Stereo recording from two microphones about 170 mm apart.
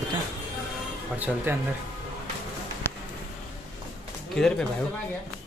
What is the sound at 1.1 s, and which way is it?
Speech, 10° right (ahead or behind).